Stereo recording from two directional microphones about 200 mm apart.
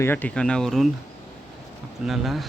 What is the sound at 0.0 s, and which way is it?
Speech, 10° left (ahead or behind).